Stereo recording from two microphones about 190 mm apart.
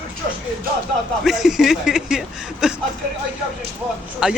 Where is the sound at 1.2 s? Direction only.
Centre (ahead or behind).